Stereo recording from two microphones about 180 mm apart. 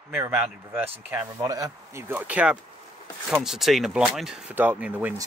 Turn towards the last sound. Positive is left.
turn(degrees=-10)  # may be behind; listen again after turning